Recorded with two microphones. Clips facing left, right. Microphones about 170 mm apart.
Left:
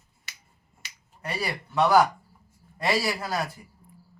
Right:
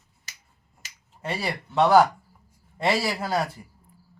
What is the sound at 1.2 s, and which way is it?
Speech, 25° right (ahead or behind).